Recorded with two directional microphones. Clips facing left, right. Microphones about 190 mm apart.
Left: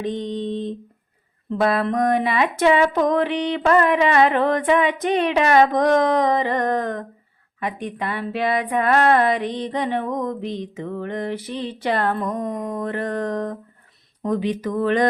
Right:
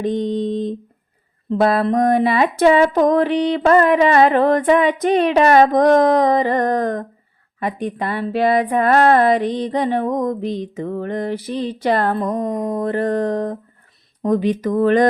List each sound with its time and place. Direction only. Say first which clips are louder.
0.0 s speech: right 5 dB; 45° right (ahead or behind)